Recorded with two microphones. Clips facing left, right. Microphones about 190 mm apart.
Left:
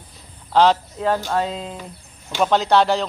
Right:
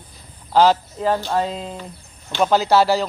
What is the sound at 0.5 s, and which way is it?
Speech, centre (ahead or behind).